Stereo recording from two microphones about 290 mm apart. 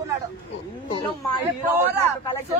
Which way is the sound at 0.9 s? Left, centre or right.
Centre.